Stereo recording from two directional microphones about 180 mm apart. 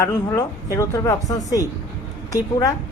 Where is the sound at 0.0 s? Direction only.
15° left (ahead or behind).